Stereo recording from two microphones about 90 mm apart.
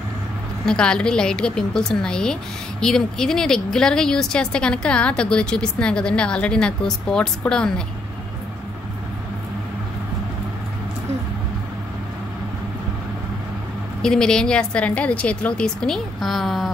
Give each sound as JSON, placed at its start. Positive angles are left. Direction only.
{"t": 0.7, "sound": "speech", "side_deg": 10}
{"t": 14.0, "sound": "speech", "side_deg": 10}